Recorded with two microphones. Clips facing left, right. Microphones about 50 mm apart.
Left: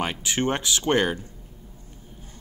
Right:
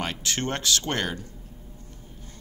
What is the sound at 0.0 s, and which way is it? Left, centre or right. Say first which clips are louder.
Speech: left 4 dB; centre.